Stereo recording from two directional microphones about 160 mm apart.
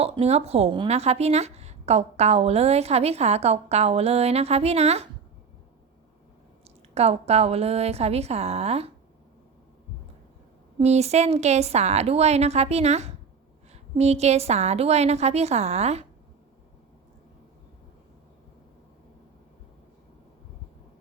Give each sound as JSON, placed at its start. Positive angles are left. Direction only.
{"t": 0.0, "sound": "a woman's voice", "side_deg": -40}
{"t": 6.7, "sound": "a woman's voice", "side_deg": -40}
{"t": 10.8, "sound": "a woman's voice", "side_deg": -40}